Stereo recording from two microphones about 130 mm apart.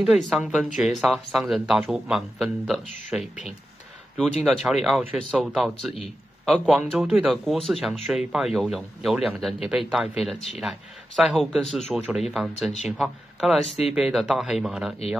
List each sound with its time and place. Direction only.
0.0 s speech: 5° right (ahead or behind)
7.0 s speech: 10° right (ahead or behind)
13.7 s speech: 50° left (ahead or behind)
13.9 s speech: 5° right (ahead or behind)